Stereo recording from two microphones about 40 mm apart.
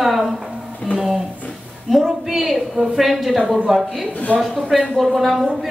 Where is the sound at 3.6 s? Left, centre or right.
Centre.